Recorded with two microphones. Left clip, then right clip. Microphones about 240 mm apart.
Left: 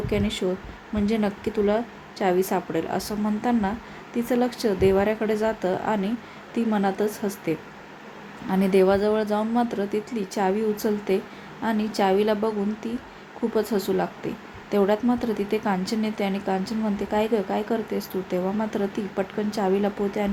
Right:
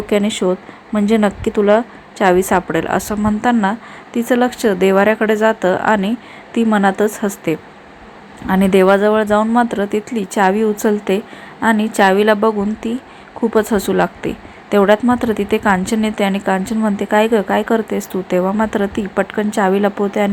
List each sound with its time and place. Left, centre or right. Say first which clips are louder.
0.1 s a woman's voice: right 11 dB; centre
13.9 s a woman's voice: right 10 dB; centre